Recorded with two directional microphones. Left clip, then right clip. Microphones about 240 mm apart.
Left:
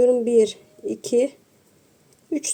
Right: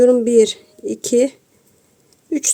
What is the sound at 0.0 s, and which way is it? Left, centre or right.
Speech, right.